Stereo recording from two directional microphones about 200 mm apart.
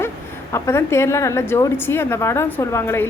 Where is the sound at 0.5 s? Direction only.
15° left (ahead or behind).